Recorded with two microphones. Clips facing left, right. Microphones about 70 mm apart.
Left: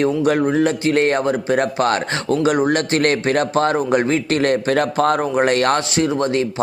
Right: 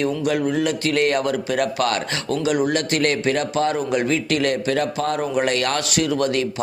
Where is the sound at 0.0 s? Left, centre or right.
Left.